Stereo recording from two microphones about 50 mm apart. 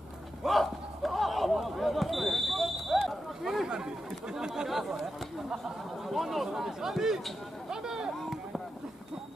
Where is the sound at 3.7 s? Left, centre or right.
Centre.